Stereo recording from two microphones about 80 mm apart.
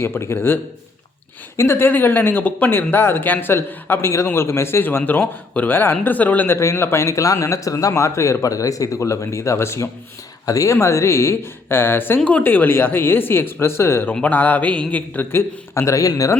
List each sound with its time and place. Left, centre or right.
0.0 s a man's voice: left
6.6 s a man's voice: left
10.4 s a man's voice: left
14.1 s speech: left